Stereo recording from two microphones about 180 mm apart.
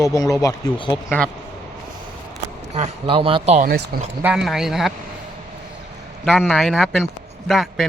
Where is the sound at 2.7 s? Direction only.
35° right (ahead or behind).